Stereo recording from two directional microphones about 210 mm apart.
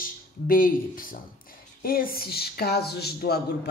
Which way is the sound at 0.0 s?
40° left (ahead or behind).